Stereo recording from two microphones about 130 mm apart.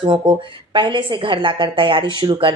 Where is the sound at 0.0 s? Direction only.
40° right (ahead or behind).